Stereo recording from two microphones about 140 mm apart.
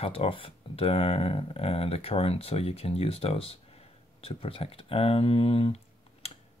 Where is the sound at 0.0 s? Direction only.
45° left (ahead or behind).